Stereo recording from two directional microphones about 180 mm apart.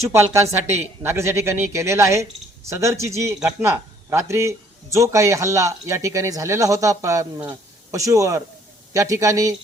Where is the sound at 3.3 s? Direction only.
5° right (ahead or behind).